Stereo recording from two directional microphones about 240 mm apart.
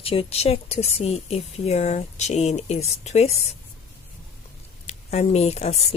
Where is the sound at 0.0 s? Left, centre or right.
Left.